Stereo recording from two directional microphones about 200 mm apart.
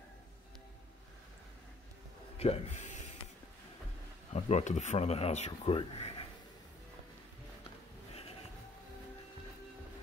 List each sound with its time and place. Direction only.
2.3 s speech: 30° left (ahead or behind)
4.3 s speech: 35° left (ahead or behind)
8.1 s a sound: 30° left (ahead or behind)